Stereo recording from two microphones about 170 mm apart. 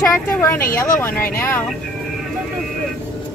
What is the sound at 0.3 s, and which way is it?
Speech, 10° left (ahead or behind).